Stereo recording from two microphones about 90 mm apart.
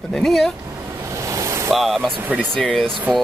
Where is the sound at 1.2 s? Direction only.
35° right (ahead or behind).